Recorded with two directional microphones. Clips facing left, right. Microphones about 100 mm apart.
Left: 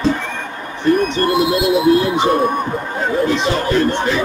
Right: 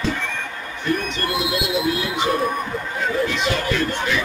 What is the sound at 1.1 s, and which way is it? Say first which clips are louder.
Speech: left 8 dB; 35° left (ahead or behind).